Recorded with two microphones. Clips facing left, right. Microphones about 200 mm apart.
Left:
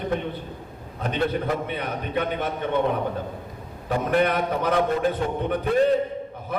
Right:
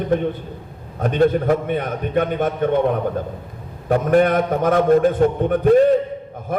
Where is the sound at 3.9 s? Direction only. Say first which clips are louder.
Right 6 dB; 45° right (ahead or behind).